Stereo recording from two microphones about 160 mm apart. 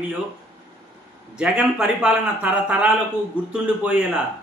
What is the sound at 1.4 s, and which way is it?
A man's voice, 5° right (ahead or behind).